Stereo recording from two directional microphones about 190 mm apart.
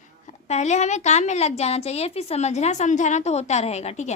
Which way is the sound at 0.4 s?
35° left (ahead or behind).